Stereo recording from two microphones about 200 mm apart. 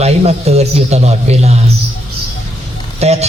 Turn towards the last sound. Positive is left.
turn(degrees=-30)  # may be behind; listen again after turning